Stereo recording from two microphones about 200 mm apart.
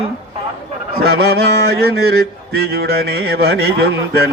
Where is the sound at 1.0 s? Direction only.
50° right (ahead or behind).